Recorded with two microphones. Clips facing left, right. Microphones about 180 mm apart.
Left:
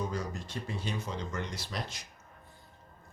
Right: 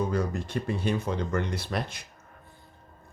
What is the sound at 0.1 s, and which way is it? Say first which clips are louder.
Speech: right 8 dB; 60° right (ahead or behind).